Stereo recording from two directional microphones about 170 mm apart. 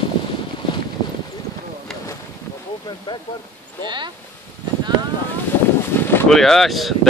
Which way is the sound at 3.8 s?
25° right (ahead or behind).